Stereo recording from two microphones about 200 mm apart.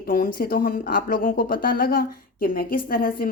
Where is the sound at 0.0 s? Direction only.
45° left (ahead or behind).